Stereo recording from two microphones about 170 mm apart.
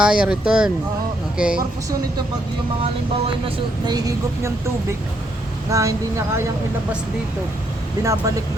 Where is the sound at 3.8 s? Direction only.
20° right (ahead or behind).